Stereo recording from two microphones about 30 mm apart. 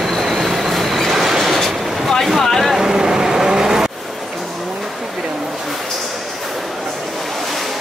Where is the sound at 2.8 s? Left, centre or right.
Centre.